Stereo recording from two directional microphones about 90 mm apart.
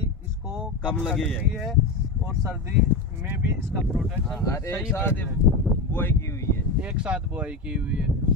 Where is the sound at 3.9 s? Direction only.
5° right (ahead or behind).